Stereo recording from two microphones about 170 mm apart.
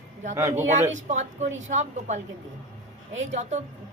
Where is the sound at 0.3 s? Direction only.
15° right (ahead or behind).